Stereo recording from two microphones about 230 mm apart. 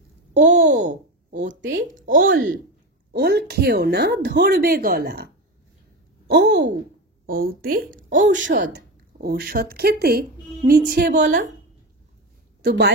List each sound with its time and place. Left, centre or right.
0.3 s a sound: right
1.5 s a woman's voice: right
2.0 s a woman's voice: right
2.3 s speech: right
3.1 s a woman's voice: right
8.4 s a woman's voice: right
12.6 s a woman's voice: right